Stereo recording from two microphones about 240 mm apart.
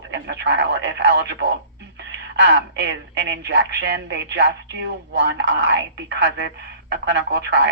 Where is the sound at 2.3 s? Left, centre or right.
Right.